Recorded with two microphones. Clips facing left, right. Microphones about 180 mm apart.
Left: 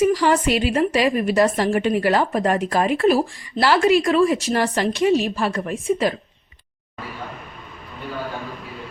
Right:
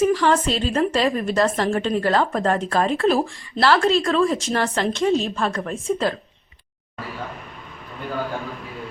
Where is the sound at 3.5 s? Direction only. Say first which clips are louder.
Left 1 dB; 15° left (ahead or behind).